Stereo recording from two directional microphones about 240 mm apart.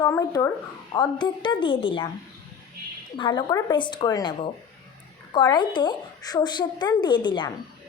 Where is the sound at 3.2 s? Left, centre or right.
Centre.